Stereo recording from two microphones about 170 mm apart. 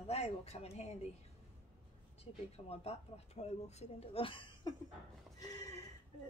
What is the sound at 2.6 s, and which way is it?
A woman's voice, 40° left (ahead or behind).